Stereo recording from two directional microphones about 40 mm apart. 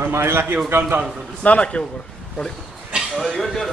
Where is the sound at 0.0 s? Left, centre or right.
Right.